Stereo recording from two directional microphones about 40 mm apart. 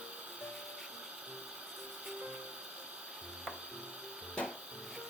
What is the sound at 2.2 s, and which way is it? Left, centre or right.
Music, right.